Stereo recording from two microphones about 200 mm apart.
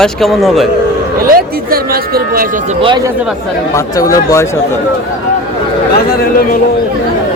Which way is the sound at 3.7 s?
15° left (ahead or behind).